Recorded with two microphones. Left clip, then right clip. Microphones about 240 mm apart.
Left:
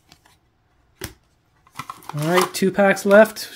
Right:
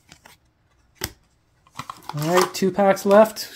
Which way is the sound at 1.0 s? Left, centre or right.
Right.